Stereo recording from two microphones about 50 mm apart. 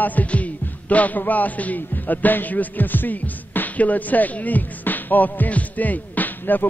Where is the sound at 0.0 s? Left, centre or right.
Left.